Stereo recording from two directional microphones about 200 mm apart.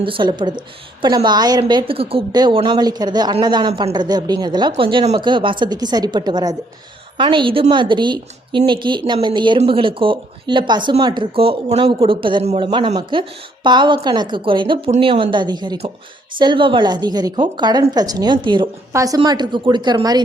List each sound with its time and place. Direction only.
0.0 s a woman's voice: 25° right (ahead or behind)